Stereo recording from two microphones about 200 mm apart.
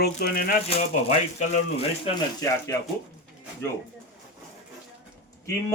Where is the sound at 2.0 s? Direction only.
20° left (ahead or behind).